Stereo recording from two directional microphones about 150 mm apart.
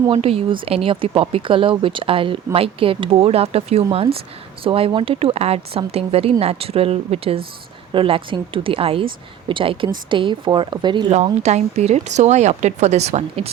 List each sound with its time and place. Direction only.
0.1 s speech: 40° right (ahead or behind)
11.1 s speech: 50° right (ahead or behind)